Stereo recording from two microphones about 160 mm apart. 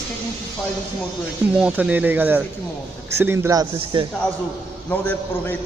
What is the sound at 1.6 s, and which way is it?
Speech, 10° right (ahead or behind).